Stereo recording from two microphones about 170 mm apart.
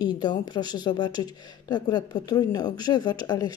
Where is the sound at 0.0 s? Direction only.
25° left (ahead or behind).